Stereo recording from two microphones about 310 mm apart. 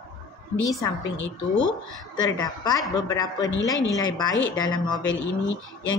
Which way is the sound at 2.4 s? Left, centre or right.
Centre.